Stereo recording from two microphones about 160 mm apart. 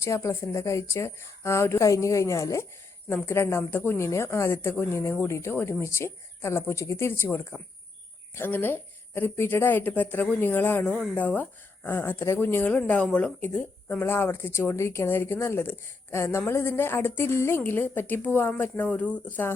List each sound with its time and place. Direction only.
0.0 s speech: 15° left (ahead or behind)